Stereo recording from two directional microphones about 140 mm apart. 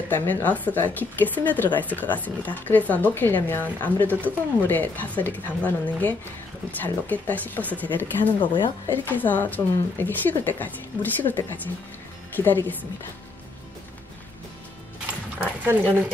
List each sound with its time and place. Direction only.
0.1 s speech: 15° left (ahead or behind)
8.4 s speech: 35° left (ahead or behind)
8.9 s speech: 15° left (ahead or behind)
15.4 s speech: 15° right (ahead or behind)